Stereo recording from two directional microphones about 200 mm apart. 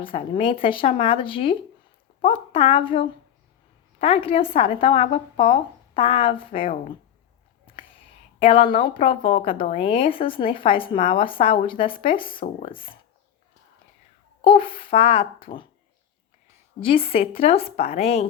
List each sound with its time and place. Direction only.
0.0 s speech: 25° left (ahead or behind)
8.4 s speech: 30° left (ahead or behind)
9.5 s speech: 45° left (ahead or behind)
9.7 s speech: 30° left (ahead or behind)
14.4 s speech: 25° left (ahead or behind)
16.8 s speech: 30° left (ahead or behind)